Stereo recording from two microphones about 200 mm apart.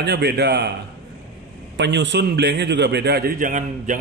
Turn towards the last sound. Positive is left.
turn(degrees=-40)  # may be behind; listen again after turning